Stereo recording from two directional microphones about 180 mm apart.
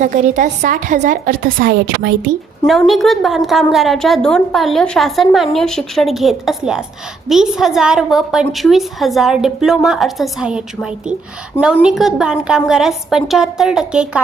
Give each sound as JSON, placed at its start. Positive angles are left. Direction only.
{"t": 0.0, "sound": "a woman's voice", "side_deg": -45}
{"t": 2.6, "sound": "a woman's voice", "side_deg": 0}